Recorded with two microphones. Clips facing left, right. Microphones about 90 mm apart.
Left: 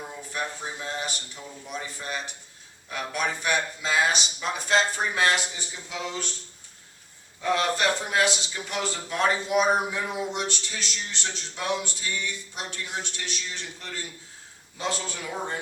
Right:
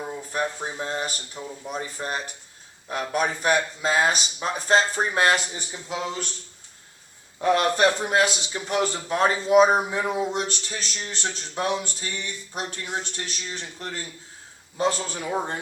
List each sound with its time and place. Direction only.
0.3 s a man's voice: 40° right (ahead or behind)
7.4 s a man's voice: 45° right (ahead or behind)